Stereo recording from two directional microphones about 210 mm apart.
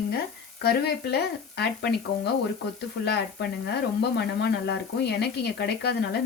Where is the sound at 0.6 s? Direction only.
50° left (ahead or behind).